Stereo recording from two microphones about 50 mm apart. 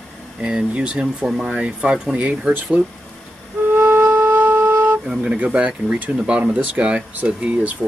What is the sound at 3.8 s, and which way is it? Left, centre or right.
Wind instrument, right.